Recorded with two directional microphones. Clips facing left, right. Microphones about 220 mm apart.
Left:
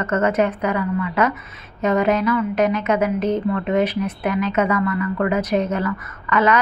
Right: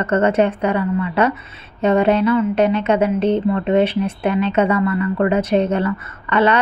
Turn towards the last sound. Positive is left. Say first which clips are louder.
# right 2 dB
turn(degrees=-30)  # may be behind; listen again after turning